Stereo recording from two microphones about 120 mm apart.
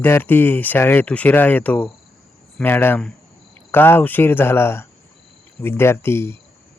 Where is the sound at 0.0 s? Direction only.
15° left (ahead or behind).